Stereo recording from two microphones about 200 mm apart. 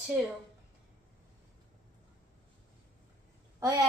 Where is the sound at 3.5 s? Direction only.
15° right (ahead or behind).